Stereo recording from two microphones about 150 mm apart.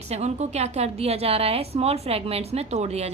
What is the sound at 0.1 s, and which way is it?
A woman's voice, 45° right (ahead or behind).